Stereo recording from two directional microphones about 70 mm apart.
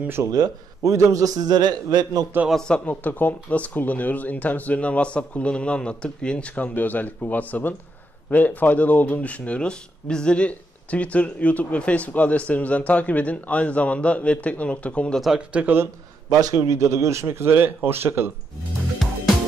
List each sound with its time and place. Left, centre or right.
0.2 s a man's voice: right
2.7 s speech: left
15.3 s speech: centre
16.3 s speech: right